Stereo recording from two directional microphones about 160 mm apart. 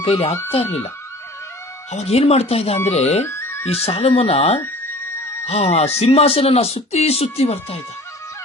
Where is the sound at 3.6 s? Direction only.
40° left (ahead or behind).